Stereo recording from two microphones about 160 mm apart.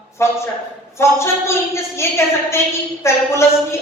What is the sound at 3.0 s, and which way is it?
Speech, 15° left (ahead or behind).